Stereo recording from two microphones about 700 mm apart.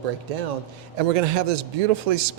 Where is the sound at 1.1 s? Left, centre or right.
Right.